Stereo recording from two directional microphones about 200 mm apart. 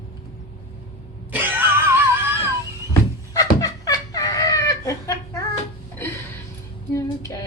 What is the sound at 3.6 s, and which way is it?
Chicken, 20° left (ahead or behind).